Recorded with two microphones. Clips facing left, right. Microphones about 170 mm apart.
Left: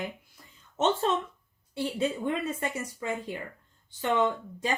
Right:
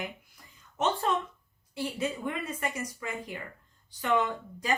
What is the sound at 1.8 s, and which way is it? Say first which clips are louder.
Speech: left 3 dB; 25° left (ahead or behind).